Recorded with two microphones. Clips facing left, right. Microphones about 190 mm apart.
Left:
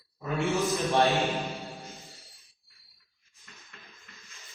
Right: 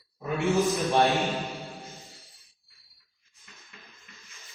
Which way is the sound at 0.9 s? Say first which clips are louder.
Even; 15° right (ahead or behind).